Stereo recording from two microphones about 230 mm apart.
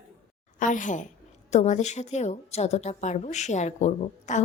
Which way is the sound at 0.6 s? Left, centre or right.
Left.